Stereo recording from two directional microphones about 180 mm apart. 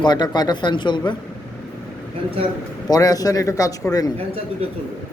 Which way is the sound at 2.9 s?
20° left (ahead or behind).